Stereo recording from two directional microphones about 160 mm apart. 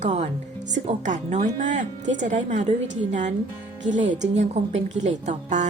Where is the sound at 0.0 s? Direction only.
45° right (ahead or behind).